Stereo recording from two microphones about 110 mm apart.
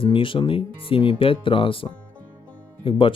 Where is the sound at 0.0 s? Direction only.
50° left (ahead or behind).